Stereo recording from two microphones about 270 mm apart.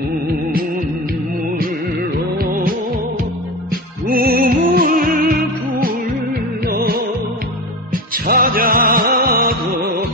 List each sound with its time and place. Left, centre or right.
2.3 s music: right
4.1 s music: right